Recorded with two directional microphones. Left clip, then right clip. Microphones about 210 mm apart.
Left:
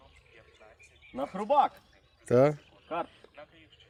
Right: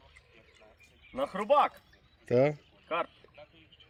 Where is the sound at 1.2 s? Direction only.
10° right (ahead or behind).